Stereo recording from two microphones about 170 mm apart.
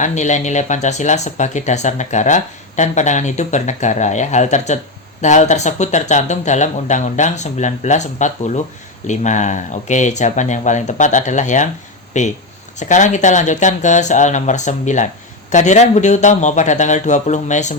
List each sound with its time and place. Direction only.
0.0 s speech: 45° left (ahead or behind)